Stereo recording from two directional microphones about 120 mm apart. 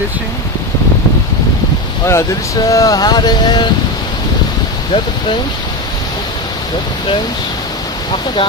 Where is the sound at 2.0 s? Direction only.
25° left (ahead or behind).